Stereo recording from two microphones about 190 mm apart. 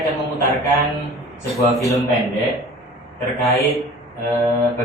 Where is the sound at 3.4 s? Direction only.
15° left (ahead or behind).